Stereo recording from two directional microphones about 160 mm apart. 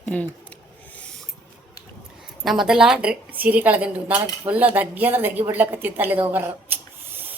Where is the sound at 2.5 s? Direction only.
5° right (ahead or behind).